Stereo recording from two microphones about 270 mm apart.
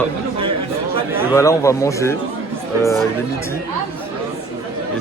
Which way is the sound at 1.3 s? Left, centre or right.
Centre.